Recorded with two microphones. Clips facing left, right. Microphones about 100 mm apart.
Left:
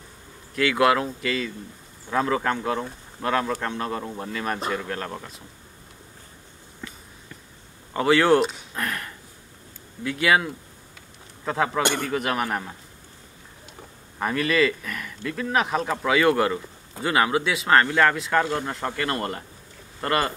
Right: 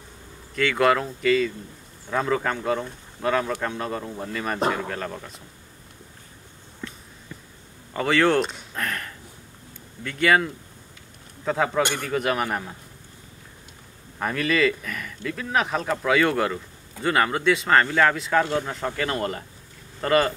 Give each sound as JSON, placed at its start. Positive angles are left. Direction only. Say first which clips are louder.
{"t": 0.6, "sound": "speech", "louder": "even", "side_deg": 5}
{"t": 7.9, "sound": "speech", "louder": "left 2 dB", "side_deg": 5}
{"t": 14.2, "sound": "speech", "louder": "even", "side_deg": 0}